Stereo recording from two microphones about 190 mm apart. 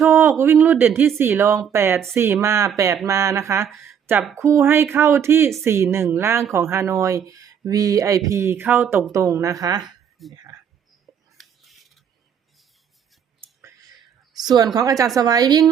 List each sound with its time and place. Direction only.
0.1 s speech: 10° right (ahead or behind)
3.7 s speech: centre (ahead or behind)
4.4 s speech: 15° right (ahead or behind)
10.3 s a sound: 20° right (ahead or behind)
11.0 s a sound: centre (ahead or behind)
14.3 s a woman's voice: 20° right (ahead or behind)